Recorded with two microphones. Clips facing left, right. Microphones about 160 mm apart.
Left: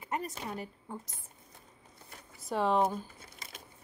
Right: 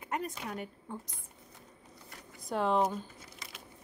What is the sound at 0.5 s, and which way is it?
Speech, centre (ahead or behind).